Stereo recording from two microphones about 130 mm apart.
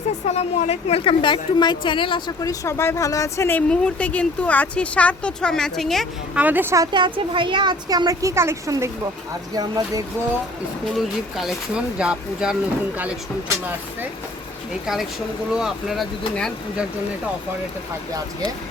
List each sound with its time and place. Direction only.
0.3 s a woman's voice: 55° left (ahead or behind); by 3.6 s 20° left (ahead or behind)
3.7 s speech: 10° left (ahead or behind)
6.3 s speech: 15° right (ahead or behind)
6.9 s speech: 40° right (ahead or behind)
10.9 s speech: centre (ahead or behind)
15.5 s speech: 5° right (ahead or behind)